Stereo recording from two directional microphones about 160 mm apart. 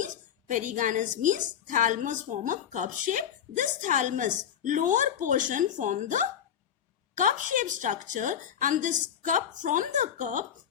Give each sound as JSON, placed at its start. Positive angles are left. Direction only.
{"t": 0.0, "sound": "a woman's voice", "side_deg": -55}